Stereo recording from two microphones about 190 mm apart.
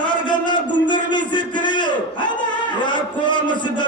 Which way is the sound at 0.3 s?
25° left (ahead or behind).